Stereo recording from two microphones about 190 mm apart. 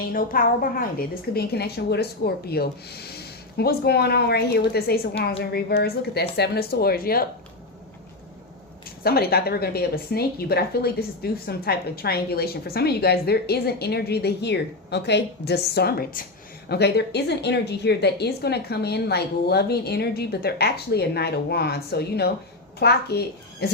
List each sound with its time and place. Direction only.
0.1 s a woman's voice: 50° left (ahead or behind)
9.0 s a woman's voice: 55° left (ahead or behind)